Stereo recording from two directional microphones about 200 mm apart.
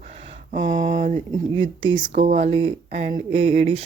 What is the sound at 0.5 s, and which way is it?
Speech, 40° right (ahead or behind).